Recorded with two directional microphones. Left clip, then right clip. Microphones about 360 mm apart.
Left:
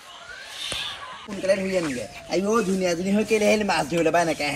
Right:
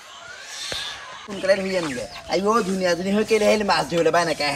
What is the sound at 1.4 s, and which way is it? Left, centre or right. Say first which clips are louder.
Speech: right 2 dB; centre.